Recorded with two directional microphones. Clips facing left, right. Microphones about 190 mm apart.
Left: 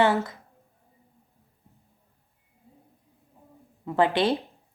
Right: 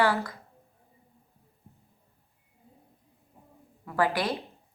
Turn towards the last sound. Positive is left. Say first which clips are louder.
# left 5 dB
turn(degrees=25)  # may be behind; listen again after turning